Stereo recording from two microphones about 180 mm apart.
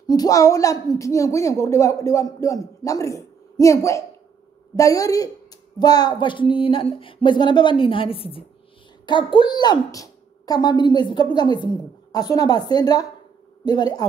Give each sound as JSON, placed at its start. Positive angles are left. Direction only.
{"t": 0.0, "sound": "a woman's voice", "side_deg": 20}